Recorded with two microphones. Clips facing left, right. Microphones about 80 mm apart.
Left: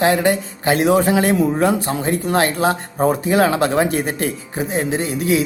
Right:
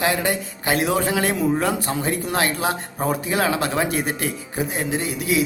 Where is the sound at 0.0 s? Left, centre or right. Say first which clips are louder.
Left 6 dB; left.